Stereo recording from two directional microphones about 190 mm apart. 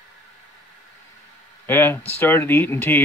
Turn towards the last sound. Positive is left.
turn(degrees=10)  # may be behind; listen again after turning